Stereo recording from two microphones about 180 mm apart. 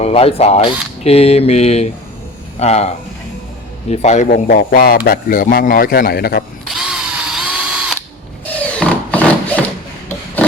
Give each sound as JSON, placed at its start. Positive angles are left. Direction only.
{"t": 0.0, "sound": "speech", "side_deg": 35}
{"t": 4.3, "sound": "a man's voice", "side_deg": 55}
{"t": 6.8, "sound": "camera", "side_deg": -5}
{"t": 8.8, "sound": "a sound", "side_deg": 5}